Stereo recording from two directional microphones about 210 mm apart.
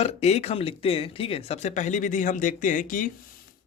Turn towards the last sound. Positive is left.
turn(degrees=40)  # may be behind; listen again after turning